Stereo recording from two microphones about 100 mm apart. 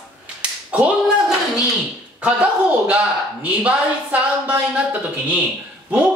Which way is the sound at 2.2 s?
10° right (ahead or behind).